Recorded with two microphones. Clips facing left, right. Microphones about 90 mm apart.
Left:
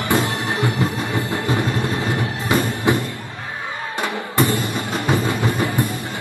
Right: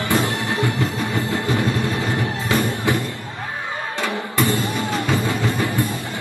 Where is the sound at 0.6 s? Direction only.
20° left (ahead or behind).